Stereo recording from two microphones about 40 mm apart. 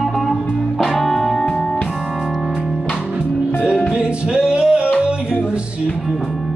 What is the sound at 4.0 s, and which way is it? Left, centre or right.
Music, right.